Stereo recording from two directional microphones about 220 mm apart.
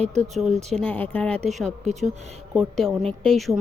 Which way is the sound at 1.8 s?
30° right (ahead or behind).